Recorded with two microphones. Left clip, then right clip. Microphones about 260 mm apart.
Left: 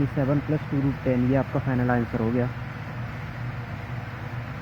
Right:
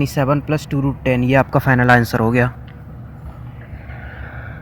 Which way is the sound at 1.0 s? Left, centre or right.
Right.